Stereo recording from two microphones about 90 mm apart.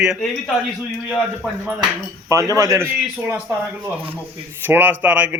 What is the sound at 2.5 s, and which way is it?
Speech, 35° right (ahead or behind).